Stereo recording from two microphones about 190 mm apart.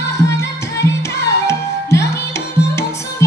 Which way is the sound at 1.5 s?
15° left (ahead or behind).